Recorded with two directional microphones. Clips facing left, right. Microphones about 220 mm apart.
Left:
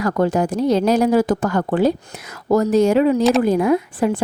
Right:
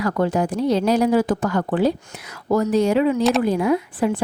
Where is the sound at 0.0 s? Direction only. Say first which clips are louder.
Left 2 dB; 45° left (ahead or behind).